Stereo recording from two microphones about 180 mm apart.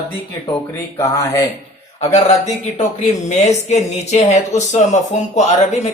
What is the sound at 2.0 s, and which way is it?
A man's voice, 40° left (ahead or behind).